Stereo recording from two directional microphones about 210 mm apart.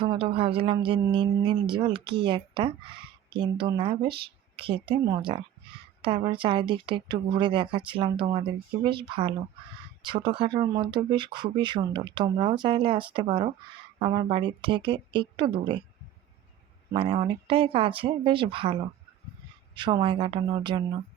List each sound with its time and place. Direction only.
0.0 s speech: 25° right (ahead or behind)
16.9 s speech: 25° right (ahead or behind)